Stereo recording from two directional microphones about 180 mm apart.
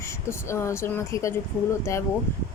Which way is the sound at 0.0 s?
15° left (ahead or behind).